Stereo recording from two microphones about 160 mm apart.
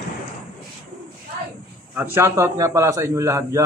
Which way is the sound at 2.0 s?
15° right (ahead or behind).